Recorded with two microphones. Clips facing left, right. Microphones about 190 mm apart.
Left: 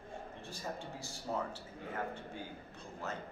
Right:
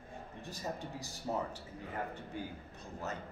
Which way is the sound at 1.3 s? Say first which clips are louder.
Right 1 dB; 15° right (ahead or behind).